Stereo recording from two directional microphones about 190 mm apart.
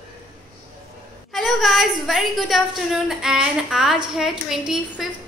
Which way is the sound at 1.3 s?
Centre (ahead or behind).